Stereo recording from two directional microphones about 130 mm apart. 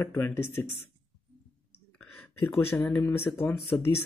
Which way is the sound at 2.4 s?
15° left (ahead or behind).